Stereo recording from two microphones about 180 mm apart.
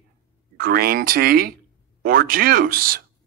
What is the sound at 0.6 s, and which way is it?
Speech, 55° right (ahead or behind).